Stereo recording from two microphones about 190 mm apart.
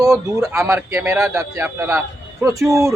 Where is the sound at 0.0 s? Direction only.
15° right (ahead or behind).